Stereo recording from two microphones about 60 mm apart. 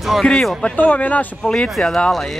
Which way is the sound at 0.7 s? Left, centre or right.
Left.